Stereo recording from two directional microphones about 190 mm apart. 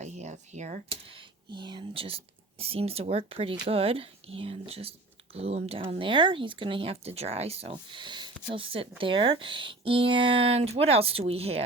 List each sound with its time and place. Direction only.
0.0 s speech: 35° right (ahead or behind)